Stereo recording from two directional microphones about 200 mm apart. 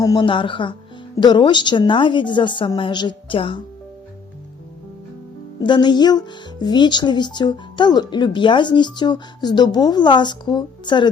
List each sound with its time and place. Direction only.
0.0 s speech: 20° left (ahead or behind)
5.6 s speech: 20° left (ahead or behind)